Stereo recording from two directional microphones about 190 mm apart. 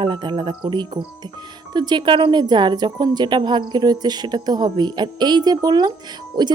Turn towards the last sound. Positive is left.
turn(degrees=-25)  # may be behind; listen again after turning